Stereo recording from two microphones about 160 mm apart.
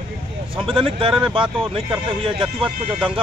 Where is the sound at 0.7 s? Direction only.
35° right (ahead or behind).